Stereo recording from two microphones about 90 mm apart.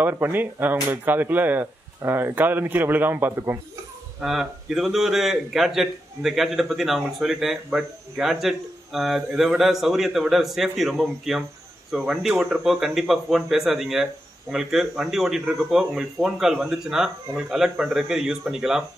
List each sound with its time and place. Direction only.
0.0 s speech: 25° right (ahead or behind)
4.2 s a man's voice: 5° right (ahead or behind)